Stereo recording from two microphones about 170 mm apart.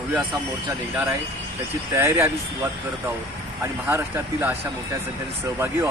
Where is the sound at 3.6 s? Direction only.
15° right (ahead or behind).